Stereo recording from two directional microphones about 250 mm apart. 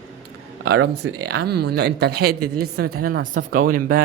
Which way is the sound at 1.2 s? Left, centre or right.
Right.